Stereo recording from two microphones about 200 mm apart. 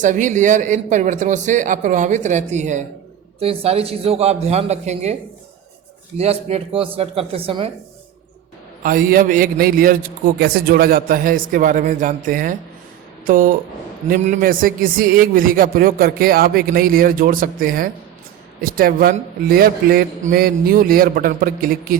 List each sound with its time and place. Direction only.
0.0 s a man's voice: 40° right (ahead or behind)
6.1 s a man's voice: 30° right (ahead or behind)
8.8 s a man's voice: 45° right (ahead or behind)